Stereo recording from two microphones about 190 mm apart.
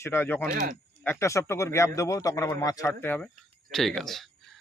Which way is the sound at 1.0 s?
15° left (ahead or behind).